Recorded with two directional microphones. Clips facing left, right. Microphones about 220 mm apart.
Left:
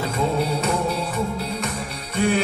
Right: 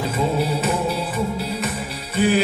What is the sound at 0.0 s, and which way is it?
Music, 5° right (ahead or behind).